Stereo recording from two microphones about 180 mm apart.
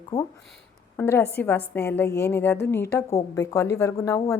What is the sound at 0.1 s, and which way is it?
A woman's voice, 20° left (ahead or behind).